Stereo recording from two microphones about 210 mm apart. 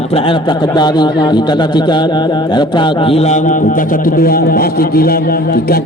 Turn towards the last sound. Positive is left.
turn(degrees=45)  # may be behind; listen again after turning